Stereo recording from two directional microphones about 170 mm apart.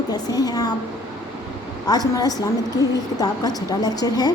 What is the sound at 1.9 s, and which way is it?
A woman's voice, 20° left (ahead or behind).